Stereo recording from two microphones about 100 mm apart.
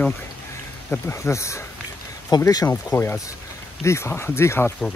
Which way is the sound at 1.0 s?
30° left (ahead or behind).